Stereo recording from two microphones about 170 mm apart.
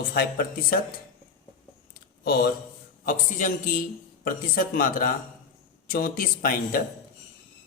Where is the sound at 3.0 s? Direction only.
55° left (ahead or behind).